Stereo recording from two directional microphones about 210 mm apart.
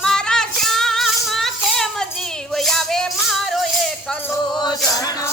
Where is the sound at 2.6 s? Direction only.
Centre (ahead or behind).